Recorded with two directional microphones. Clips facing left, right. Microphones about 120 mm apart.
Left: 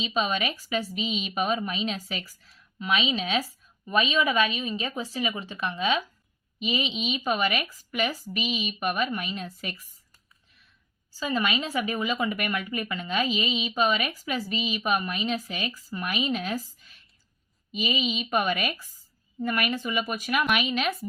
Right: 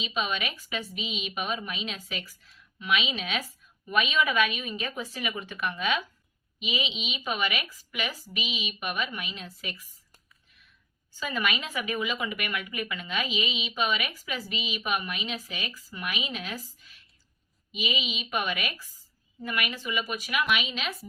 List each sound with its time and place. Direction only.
0.0 s a woman's voice: 35° left (ahead or behind)
6.6 s speech: 40° left (ahead or behind)
11.2 s speech: 30° left (ahead or behind); by 20.9 s 50° left (ahead or behind)